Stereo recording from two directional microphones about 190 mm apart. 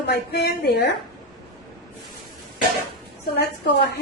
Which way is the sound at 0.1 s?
60° left (ahead or behind).